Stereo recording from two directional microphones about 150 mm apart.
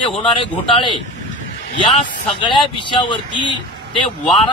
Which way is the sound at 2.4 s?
30° left (ahead or behind).